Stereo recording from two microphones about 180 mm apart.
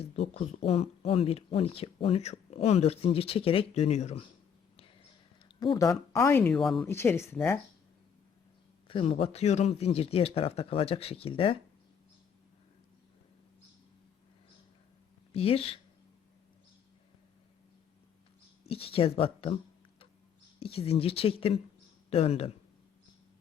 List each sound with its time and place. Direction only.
0.0 s speech: 35° left (ahead or behind)
5.5 s speech: 20° left (ahead or behind); by 6.8 s centre (ahead or behind)
6.8 s speech: 15° left (ahead or behind)
8.9 s speech: 30° left (ahead or behind)
15.3 s speech: 30° left (ahead or behind)
18.6 s speech: 30° left (ahead or behind)
20.6 s speech: 35° left (ahead or behind)